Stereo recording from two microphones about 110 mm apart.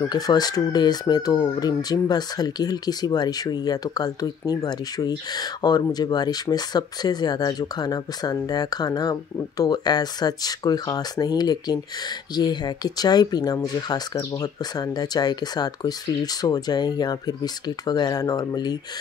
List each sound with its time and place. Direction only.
0.0 s speech: 40° left (ahead or behind)